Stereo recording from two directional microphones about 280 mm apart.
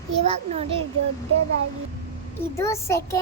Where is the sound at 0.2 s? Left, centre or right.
Right.